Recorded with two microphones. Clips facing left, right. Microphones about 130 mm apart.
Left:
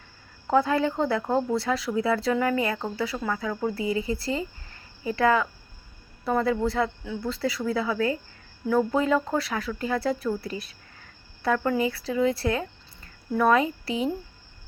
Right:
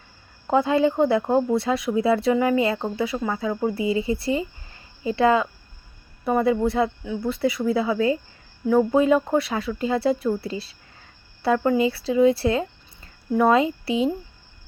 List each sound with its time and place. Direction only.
0.4 s speech: 20° right (ahead or behind)